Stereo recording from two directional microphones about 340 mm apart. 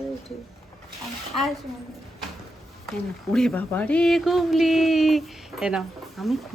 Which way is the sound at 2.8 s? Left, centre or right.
Centre.